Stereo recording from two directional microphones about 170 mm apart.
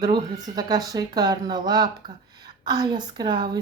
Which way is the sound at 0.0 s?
25° right (ahead or behind).